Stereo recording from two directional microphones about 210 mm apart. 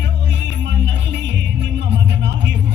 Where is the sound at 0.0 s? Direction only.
55° right (ahead or behind).